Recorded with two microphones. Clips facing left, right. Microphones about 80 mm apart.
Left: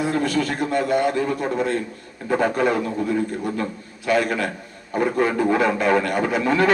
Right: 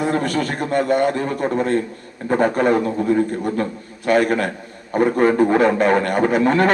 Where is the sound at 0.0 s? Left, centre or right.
Right.